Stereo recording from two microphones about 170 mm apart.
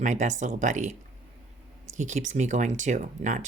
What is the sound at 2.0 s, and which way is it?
Speech, 45° right (ahead or behind).